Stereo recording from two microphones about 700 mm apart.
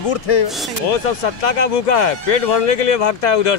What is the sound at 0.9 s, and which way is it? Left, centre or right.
Speech, left.